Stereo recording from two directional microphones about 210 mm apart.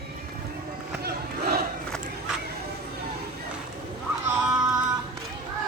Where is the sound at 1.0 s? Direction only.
50° right (ahead or behind).